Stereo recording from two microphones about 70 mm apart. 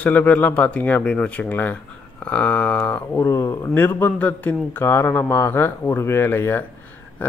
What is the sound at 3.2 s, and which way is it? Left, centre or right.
Speech, left.